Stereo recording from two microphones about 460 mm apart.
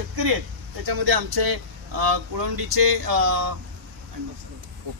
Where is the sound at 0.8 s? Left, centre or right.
Right.